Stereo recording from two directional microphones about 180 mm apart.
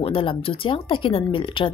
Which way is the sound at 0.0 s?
30° left (ahead or behind).